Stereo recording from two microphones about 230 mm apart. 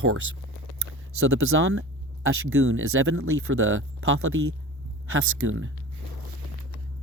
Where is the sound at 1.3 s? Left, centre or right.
Right.